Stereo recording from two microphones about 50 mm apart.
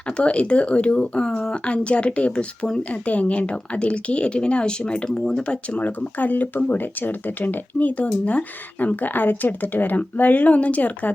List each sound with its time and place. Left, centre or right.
0.2 s a woman's voice: left
5.8 s speech: left